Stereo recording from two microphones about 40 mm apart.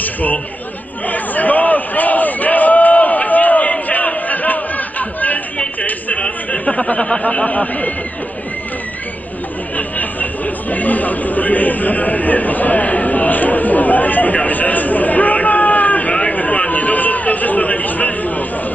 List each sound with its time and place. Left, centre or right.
0.0 s chatter: left
1.0 s a sound: left
6.2 s speech: left
9.8 s chatter: left